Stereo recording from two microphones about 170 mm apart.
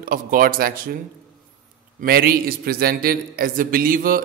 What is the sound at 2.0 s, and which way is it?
A man's voice, 65° right (ahead or behind).